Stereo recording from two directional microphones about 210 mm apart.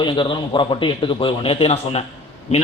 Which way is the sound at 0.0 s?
25° left (ahead or behind).